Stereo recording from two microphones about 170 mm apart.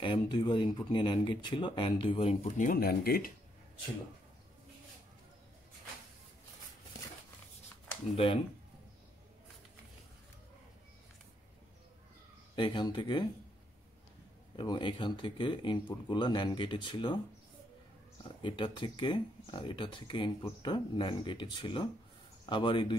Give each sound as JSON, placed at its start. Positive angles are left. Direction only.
{"t": 0.0, "sound": "speech", "side_deg": 25}
{"t": 12.5, "sound": "speech", "side_deg": 25}
{"t": 14.6, "sound": "speech", "side_deg": 25}
{"t": 18.4, "sound": "speech", "side_deg": 25}